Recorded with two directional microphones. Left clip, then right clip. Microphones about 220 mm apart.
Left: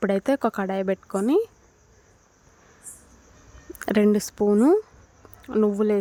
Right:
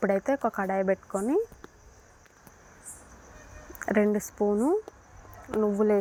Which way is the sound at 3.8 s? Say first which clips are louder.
Left 4 dB; 30° left (ahead or behind).